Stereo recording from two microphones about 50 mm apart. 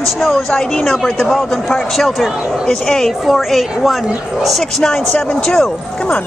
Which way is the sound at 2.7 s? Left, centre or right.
Centre.